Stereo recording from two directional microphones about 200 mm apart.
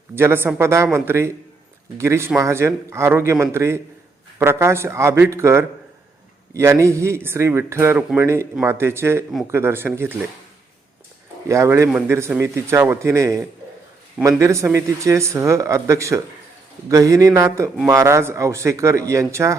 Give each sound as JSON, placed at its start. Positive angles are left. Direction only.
{"t": 0.2, "sound": "speech", "side_deg": -10}
{"t": 11.4, "sound": "speech", "side_deg": -15}